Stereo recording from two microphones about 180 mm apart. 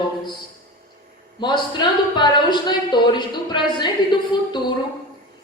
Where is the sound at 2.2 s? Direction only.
25° left (ahead or behind).